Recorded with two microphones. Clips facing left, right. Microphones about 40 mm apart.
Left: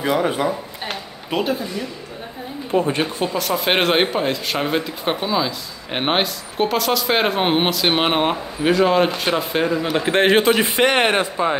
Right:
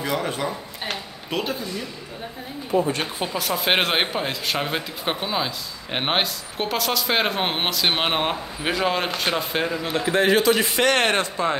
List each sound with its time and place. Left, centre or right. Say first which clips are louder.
0.0 s speech: left 6 dB; centre
0.8 s speech: left 1 dB; centre
2.7 s a man's voice: left 2 dB; left
3.2 s speech: left 4 dB; centre
10.0 s a man's voice: left 3 dB; left
10.5 s a man's voice: left 3 dB; left